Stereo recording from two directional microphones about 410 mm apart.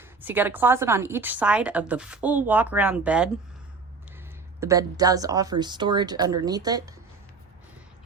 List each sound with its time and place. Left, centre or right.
0.0 s a woman's voice: centre
4.6 s speech: centre